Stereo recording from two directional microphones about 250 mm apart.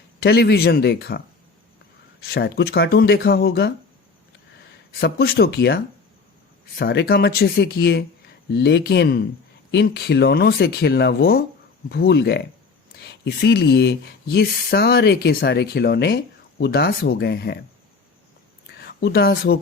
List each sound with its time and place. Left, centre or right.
0.2 s speech: left
2.2 s speech: left
4.9 s speech: left
18.8 s speech: left